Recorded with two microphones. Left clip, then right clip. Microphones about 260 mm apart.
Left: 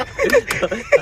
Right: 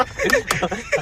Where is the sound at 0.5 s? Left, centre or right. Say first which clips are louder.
Left 4 dB; centre.